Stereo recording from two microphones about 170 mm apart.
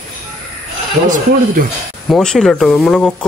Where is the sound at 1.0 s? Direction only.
55° right (ahead or behind).